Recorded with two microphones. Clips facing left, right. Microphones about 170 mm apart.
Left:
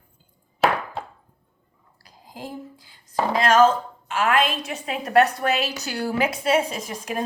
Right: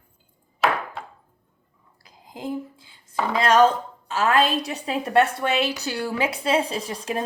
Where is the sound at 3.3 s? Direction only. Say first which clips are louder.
Even; 30° right (ahead or behind).